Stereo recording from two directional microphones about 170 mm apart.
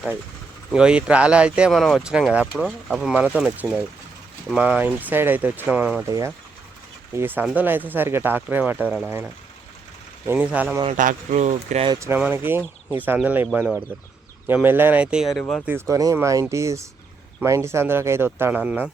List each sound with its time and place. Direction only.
0.7 s speech: 5° right (ahead or behind)
6.1 s speech: 20° right (ahead or behind)
10.2 s speech: 10° right (ahead or behind)
10.8 s speech: 50° right (ahead or behind)
11.9 s speech: 15° right (ahead or behind); by 15.6 s 5° left (ahead or behind)
15.6 s speech: 15° right (ahead or behind)